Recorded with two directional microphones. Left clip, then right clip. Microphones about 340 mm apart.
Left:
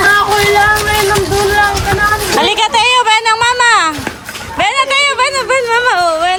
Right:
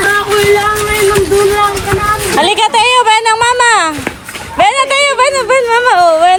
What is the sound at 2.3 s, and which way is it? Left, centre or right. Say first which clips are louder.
A woman's voice: right 4 dB; centre.